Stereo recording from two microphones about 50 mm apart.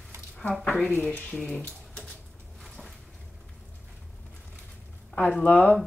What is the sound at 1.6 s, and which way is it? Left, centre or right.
Typewriter, left.